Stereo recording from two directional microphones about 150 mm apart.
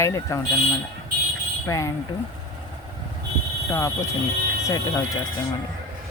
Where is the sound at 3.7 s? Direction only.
20° left (ahead or behind).